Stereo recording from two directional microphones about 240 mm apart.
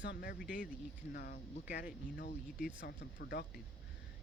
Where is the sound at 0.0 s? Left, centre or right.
Left.